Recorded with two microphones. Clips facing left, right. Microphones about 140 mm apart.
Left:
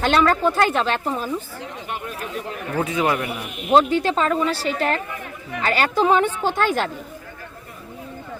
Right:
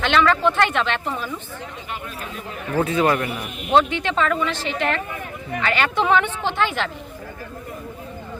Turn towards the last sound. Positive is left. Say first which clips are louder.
# left 2 dB
turn(degrees=45)  # may be behind; listen again after turning